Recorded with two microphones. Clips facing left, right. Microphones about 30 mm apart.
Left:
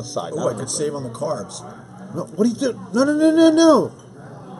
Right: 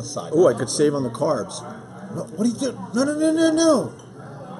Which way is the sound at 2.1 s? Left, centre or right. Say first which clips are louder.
Left 3 dB; centre.